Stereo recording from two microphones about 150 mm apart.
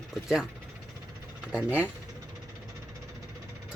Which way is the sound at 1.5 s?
10° right (ahead or behind).